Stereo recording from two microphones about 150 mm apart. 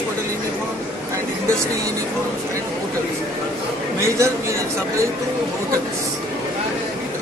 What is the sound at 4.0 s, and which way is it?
Speech, 20° right (ahead or behind).